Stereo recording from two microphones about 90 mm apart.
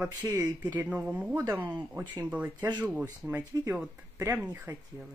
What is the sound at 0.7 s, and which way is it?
Speech, 20° right (ahead or behind).